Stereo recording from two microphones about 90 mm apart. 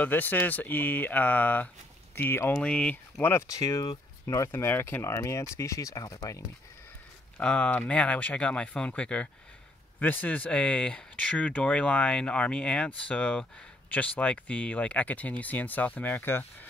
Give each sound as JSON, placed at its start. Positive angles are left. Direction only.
{"t": 0.0, "sound": "speech", "side_deg": 20}
{"t": 2.5, "sound": "speech", "side_deg": 10}
{"t": 3.2, "sound": "speech", "side_deg": 20}
{"t": 3.4, "sound": "speech", "side_deg": 35}
{"t": 7.3, "sound": "speech", "side_deg": 10}